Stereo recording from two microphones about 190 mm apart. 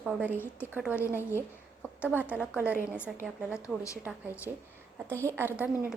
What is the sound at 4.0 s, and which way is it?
A woman's voice, 10° right (ahead or behind).